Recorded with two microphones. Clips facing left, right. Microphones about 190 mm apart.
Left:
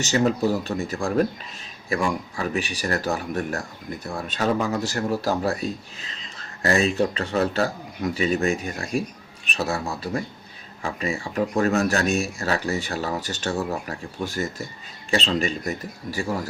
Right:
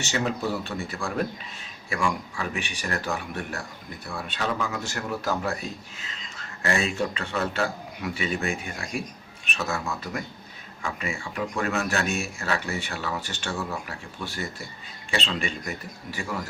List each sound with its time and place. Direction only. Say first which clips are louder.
0.0 s speech: left 6 dB; 40° left (ahead or behind)